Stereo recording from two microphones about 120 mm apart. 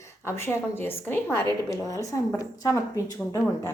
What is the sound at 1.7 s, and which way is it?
A woman's voice, 25° left (ahead or behind).